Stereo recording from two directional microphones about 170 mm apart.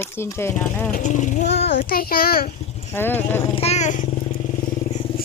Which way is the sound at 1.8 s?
60° left (ahead or behind).